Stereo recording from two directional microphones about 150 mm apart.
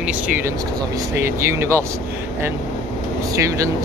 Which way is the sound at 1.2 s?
20° right (ahead or behind).